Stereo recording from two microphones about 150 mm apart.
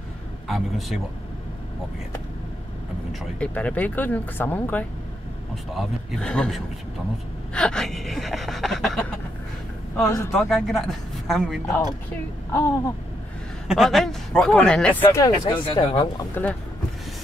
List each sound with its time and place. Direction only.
0.5 s gasp: centre (ahead or behind)
3.1 s speech: 10° left (ahead or behind)
5.7 s gasp: centre (ahead or behind)
10.3 s gasp: centre (ahead or behind)
12.5 s a sound: 20° left (ahead or behind)
13.7 s speech: centre (ahead or behind); by 15.3 s 20° left (ahead or behind)
15.4 s speech: 35° left (ahead or behind)
16.4 s speech: 15° left (ahead or behind)